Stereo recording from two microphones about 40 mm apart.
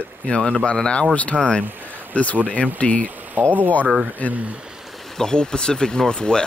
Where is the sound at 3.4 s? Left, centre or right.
Right.